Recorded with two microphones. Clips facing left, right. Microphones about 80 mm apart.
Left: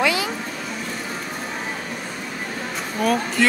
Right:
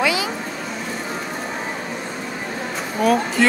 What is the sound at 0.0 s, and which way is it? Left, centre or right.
Vehicle, centre.